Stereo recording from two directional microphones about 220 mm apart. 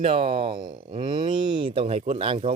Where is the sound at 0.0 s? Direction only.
25° right (ahead or behind).